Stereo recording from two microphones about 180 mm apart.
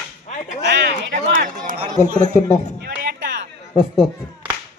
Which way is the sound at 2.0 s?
40° left (ahead or behind).